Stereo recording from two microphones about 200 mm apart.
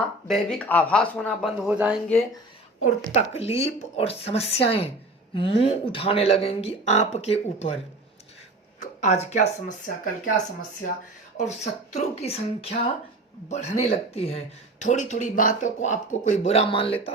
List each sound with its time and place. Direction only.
0.3 s speech: 5° left (ahead or behind)
1.6 s speech: 5° right (ahead or behind)
3.1 s speech: 30° left (ahead or behind)
9.0 s speech: 35° left (ahead or behind)
11.3 s speech: 35° left (ahead or behind)